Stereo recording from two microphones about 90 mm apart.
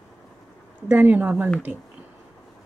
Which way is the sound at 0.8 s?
20° right (ahead or behind).